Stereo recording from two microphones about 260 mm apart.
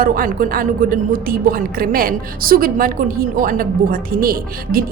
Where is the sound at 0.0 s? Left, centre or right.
Right.